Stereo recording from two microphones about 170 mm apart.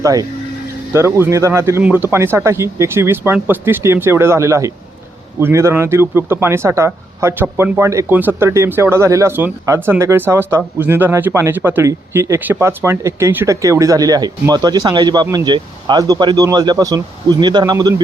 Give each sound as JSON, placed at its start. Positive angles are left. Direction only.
{"t": 0.0, "sound": "a man's voice", "side_deg": -20}